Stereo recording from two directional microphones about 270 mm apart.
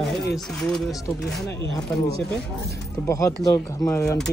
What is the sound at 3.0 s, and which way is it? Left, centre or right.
Speech, centre.